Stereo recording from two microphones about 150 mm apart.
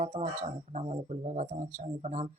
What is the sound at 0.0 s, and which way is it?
Speech, 50° right (ahead or behind).